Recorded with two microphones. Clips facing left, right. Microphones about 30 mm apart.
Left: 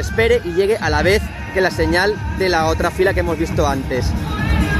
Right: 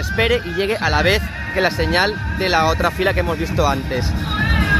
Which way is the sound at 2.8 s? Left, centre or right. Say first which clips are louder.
Left 1 dB; right.